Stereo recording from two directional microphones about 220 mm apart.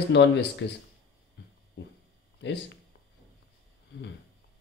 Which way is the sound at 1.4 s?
55° left (ahead or behind).